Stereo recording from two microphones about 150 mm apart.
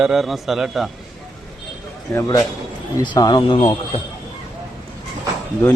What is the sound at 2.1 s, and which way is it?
A man's voice, 20° left (ahead or behind).